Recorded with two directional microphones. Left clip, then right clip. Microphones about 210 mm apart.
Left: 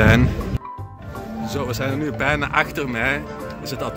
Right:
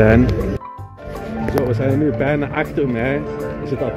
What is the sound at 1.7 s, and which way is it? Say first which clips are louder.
Speech: right 6 dB; 10° left (ahead or behind).